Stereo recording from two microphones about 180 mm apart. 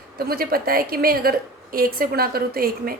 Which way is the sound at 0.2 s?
55° right (ahead or behind).